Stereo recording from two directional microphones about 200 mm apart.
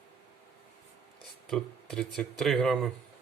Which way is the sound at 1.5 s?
Centre (ahead or behind).